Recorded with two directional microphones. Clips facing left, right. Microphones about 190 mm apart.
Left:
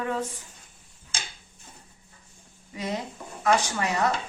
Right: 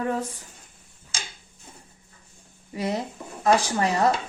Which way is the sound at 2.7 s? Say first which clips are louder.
Right 4 dB; 35° right (ahead or behind).